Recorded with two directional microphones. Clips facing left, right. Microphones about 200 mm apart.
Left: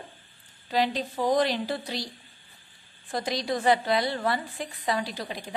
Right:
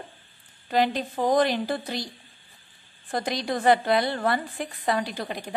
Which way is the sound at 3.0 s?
55° right (ahead or behind).